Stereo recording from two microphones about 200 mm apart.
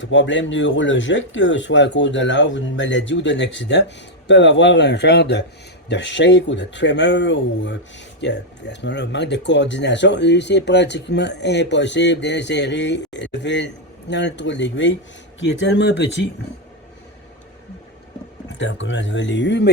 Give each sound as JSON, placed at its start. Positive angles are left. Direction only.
{"t": 0.0, "sound": "speech", "side_deg": 65}
{"t": 18.4, "sound": "speech", "side_deg": 65}